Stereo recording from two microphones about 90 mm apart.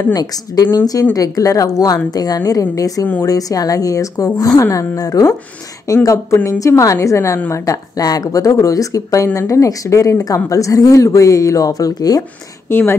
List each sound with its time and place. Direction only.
0.1 s speech: 45° left (ahead or behind)
12.6 s speech: 25° left (ahead or behind)